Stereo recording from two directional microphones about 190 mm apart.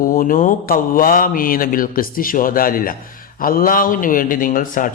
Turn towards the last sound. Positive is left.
turn(degrees=45)  # may be behind; listen again after turning